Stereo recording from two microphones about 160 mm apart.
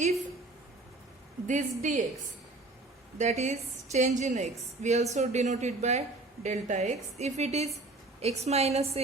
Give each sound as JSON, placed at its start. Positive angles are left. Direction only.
{"t": 1.5, "sound": "a woman's voice", "side_deg": -50}
{"t": 3.2, "sound": "a woman's voice", "side_deg": -45}